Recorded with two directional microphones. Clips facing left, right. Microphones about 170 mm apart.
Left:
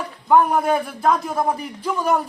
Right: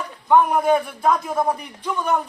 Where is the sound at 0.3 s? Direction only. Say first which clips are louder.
Even; centre (ahead or behind).